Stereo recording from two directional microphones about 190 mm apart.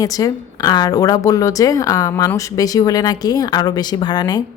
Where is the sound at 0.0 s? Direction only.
20° left (ahead or behind).